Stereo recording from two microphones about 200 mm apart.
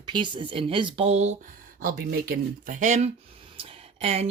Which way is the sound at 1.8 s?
45° right (ahead or behind).